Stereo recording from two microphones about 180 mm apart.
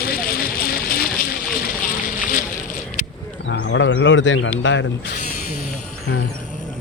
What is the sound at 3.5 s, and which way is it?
Speech, 90° left.